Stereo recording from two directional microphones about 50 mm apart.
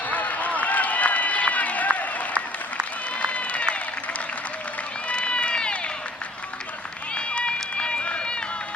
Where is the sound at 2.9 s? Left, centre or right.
Left.